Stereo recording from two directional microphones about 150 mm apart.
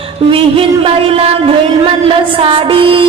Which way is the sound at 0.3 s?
40° right (ahead or behind).